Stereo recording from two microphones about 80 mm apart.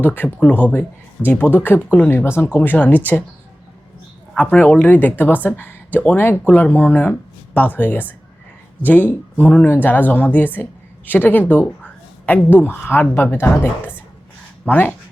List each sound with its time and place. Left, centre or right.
0.0 s speech: left
4.4 s speech: centre